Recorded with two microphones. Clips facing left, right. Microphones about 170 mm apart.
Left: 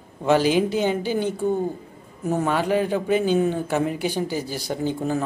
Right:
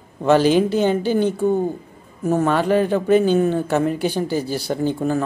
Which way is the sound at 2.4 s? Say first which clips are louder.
Right 4 dB; 10° left (ahead or behind).